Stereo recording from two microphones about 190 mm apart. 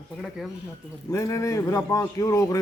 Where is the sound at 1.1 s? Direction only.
15° left (ahead or behind).